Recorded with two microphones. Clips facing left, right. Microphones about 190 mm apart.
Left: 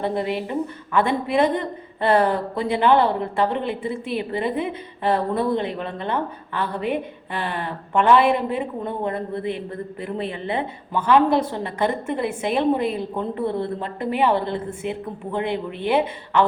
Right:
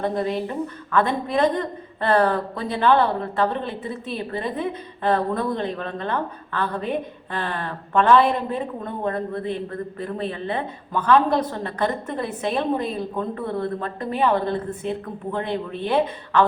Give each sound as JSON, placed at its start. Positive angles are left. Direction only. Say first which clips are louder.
{"t": 0.0, "sound": "a woman's voice", "louder": "even", "side_deg": 15}